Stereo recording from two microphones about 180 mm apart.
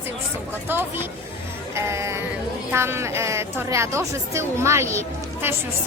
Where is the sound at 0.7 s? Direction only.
10° right (ahead or behind).